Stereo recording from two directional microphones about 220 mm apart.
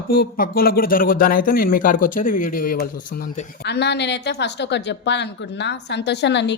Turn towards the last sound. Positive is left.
turn(degrees=50)  # may be behind; listen again after turning